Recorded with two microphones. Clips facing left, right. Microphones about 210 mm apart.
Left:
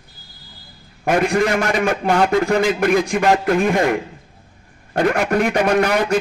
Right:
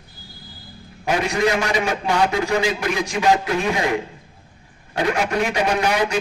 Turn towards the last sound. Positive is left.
turn(degrees=55)  # may be behind; listen again after turning